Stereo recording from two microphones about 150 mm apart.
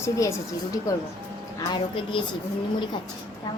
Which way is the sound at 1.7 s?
35° left (ahead or behind).